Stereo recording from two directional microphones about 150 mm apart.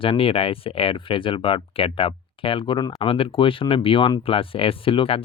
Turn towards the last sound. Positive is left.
turn(degrees=35)  # may be behind; listen again after turning